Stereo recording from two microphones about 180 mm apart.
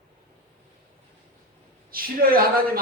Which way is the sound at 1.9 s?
55° right (ahead or behind).